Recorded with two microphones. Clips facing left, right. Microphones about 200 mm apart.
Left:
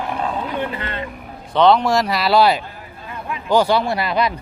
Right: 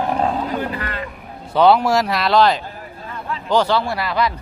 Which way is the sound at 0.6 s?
25° left (ahead or behind).